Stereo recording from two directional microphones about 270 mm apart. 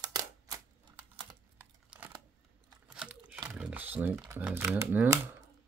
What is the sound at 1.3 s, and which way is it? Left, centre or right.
Computer keyboard, centre.